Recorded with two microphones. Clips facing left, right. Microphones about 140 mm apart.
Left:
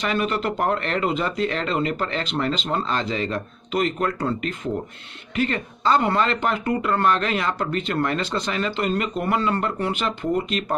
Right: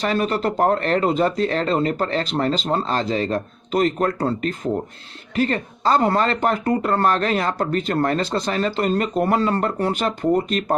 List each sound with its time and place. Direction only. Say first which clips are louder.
0.0 s speech: right 3 dB; 35° right (ahead or behind)